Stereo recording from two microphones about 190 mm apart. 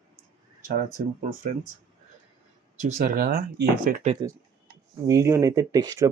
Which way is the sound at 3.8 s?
40° right (ahead or behind).